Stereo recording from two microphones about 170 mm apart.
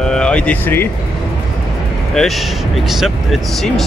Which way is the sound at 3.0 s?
Centre (ahead or behind).